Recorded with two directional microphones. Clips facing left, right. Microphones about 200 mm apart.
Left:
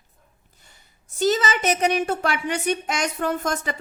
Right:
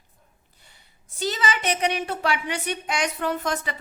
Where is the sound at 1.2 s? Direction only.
45° left (ahead or behind).